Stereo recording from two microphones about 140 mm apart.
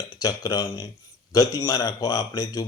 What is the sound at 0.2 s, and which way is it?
A man's voice, 25° left (ahead or behind).